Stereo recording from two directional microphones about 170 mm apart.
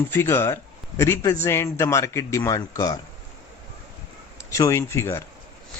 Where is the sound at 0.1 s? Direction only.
15° left (ahead or behind).